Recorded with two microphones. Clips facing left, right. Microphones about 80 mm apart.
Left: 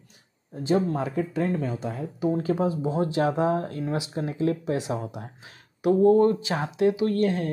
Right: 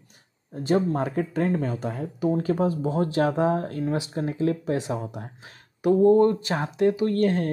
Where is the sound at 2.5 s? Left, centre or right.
Centre.